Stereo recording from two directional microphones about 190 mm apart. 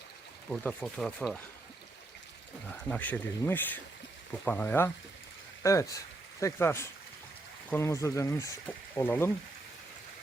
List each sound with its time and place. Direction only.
0.5 s speech: 5° left (ahead or behind)
2.9 s speech: 10° left (ahead or behind)